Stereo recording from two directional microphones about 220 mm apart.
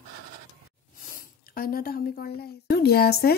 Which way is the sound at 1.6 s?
40° left (ahead or behind).